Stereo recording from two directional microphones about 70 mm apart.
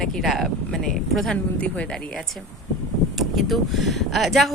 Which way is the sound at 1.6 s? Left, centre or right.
Centre.